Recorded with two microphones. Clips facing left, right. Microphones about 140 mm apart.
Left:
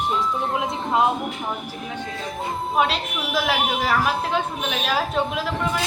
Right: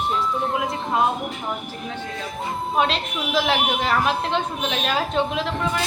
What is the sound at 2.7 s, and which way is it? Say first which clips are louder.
A woman's voice: even; centre (ahead or behind).